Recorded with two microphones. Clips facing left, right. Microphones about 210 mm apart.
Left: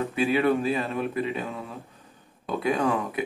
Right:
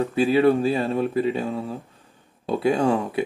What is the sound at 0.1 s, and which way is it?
Speech, 35° right (ahead or behind).